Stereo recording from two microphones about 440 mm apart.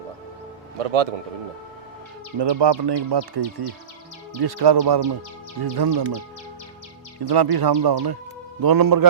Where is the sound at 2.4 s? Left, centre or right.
Right.